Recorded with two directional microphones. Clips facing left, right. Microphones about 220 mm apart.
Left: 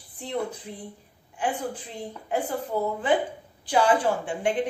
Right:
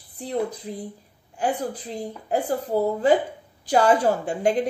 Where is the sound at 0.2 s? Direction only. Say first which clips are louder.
Right 4 dB; 35° right (ahead or behind).